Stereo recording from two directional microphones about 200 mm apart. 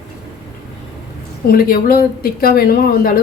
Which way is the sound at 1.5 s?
45° left (ahead or behind).